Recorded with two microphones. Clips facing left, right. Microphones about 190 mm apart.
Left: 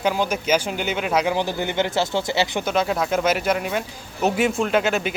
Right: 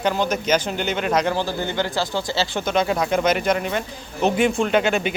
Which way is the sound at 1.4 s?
20° left (ahead or behind).